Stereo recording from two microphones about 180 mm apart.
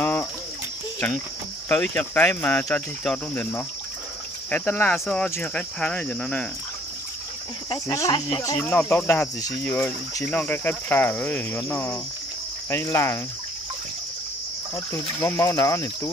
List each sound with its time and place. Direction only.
0.0 s a sound: 10° left (ahead or behind)
1.7 s speech: 10° left (ahead or behind)
7.7 s speech: 20° left (ahead or behind)
14.9 s speech: 15° left (ahead or behind)